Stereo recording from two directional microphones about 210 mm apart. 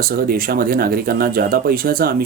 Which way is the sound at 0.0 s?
45° right (ahead or behind).